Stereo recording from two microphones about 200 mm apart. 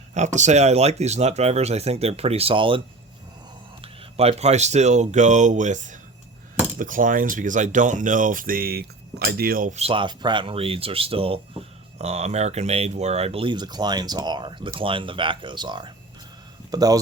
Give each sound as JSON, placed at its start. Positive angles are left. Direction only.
{"t": 0.1, "sound": "speech", "side_deg": -35}